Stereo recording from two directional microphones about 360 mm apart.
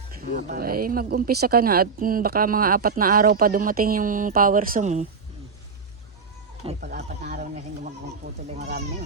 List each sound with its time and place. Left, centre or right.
0.2 s speech: right
6.7 s speech: right